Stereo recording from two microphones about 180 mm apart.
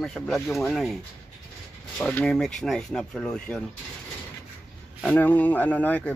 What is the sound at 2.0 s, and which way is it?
Speech, 5° left (ahead or behind).